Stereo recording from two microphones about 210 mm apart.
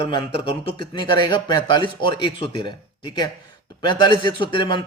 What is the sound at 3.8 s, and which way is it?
Speech, 20° left (ahead or behind).